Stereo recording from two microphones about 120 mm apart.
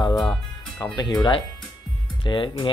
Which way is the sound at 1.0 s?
35° left (ahead or behind).